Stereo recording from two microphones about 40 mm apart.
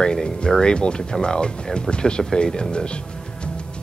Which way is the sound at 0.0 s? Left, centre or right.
Centre.